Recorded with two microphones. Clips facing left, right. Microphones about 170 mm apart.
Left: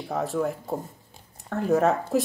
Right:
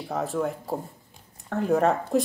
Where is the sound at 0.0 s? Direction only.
Centre (ahead or behind).